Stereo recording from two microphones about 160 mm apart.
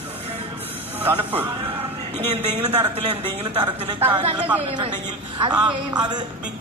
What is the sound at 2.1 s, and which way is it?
Speech, 35° right (ahead or behind).